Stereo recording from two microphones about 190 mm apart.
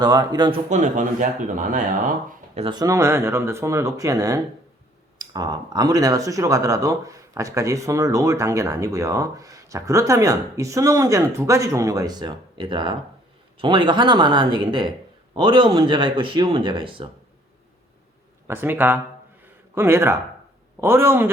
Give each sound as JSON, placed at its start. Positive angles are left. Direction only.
{"t": 0.0, "sound": "speech", "side_deg": -20}
{"t": 0.7, "sound": "speech", "side_deg": -40}
{"t": 2.6, "sound": "speech", "side_deg": -25}
{"t": 18.4, "sound": "speech", "side_deg": -10}